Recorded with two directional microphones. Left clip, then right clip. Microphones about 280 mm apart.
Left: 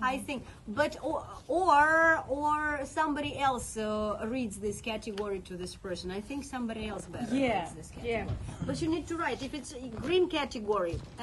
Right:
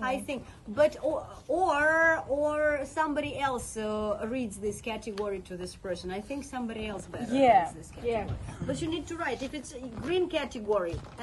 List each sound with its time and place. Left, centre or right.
0.0 s a woman's voice: centre
7.4 s speech: centre
8.7 s a woman's voice: centre